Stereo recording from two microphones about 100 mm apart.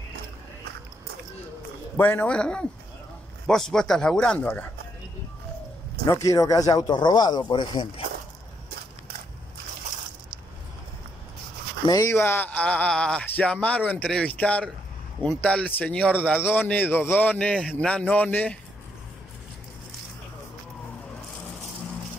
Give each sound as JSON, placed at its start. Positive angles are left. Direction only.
{"t": 2.0, "sound": "speech", "side_deg": 15}
{"t": 6.0, "sound": "speech", "side_deg": 35}
{"t": 11.8, "sound": "speech", "side_deg": 35}